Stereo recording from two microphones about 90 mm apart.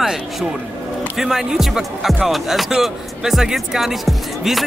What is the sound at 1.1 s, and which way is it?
Speech, 5° right (ahead or behind).